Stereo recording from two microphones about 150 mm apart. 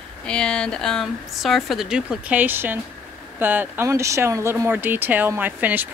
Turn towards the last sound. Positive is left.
turn(degrees=-10)  # may be behind; listen again after turning